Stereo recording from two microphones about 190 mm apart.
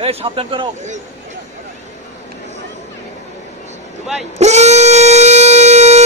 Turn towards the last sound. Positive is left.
turn(degrees=-35)  # may be behind; listen again after turning